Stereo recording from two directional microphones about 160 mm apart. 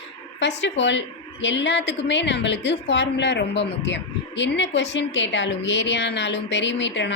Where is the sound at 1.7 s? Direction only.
90° left.